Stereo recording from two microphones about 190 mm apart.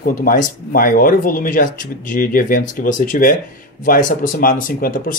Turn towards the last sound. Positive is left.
turn(degrees=45)  # may be behind; listen again after turning